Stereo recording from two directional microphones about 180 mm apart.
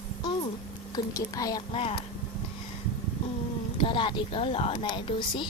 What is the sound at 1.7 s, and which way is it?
Speech, 30° left (ahead or behind).